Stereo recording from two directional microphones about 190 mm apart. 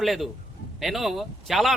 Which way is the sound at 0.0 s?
Centre (ahead or behind).